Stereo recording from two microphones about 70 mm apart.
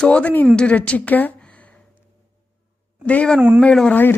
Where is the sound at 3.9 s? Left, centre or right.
Left.